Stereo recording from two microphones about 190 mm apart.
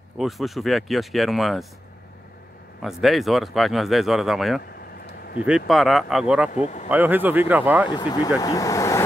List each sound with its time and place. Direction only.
0.2 s speech: centre (ahead or behind)
2.8 s speech: centre (ahead or behind)
5.0 s a sound: 55° left (ahead or behind)
5.7 s speech: centre (ahead or behind)
6.5 s speech: 40° left (ahead or behind)
6.9 s speech: 10° right (ahead or behind)
7.9 s speech: 20° left (ahead or behind)